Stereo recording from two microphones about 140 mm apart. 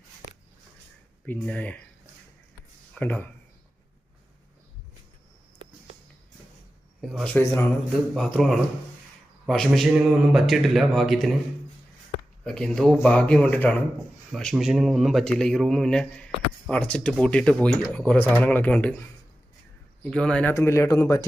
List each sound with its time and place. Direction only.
1.3 s speech: 10° left (ahead or behind)
2.9 s speech: 15° left (ahead or behind)
7.0 s a man's voice: centre (ahead or behind)
7.3 s speech: 15° left (ahead or behind)
8.1 s speech: centre (ahead or behind)
12.5 s speech: 5° left (ahead or behind)
14.3 s speech: centre (ahead or behind)
20.5 s speech: 20° left (ahead or behind)